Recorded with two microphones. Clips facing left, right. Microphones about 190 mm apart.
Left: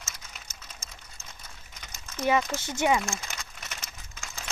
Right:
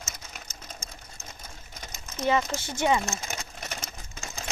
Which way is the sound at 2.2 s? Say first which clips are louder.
Even; 10° left (ahead or behind).